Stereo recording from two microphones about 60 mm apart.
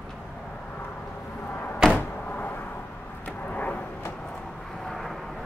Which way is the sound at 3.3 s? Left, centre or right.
Left.